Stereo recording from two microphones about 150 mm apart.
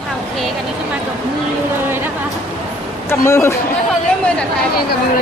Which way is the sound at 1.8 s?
15° right (ahead or behind).